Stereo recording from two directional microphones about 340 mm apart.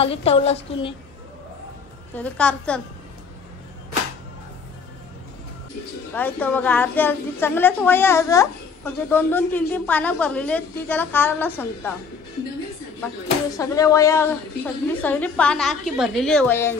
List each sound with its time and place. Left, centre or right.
0.0 s a woman's voice: centre
2.1 s a woman's voice: centre
6.1 s a woman's voice: centre
13.6 s a woman's voice: centre